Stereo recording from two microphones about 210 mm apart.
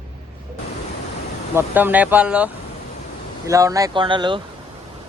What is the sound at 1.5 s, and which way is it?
Speech, 10° right (ahead or behind).